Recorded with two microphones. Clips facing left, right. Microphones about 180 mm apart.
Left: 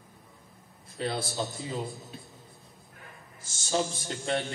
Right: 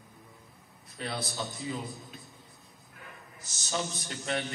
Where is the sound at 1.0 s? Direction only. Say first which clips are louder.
Left 4 dB; 25° left (ahead or behind).